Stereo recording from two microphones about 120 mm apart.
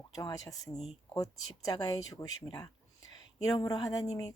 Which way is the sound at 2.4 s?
40° left (ahead or behind).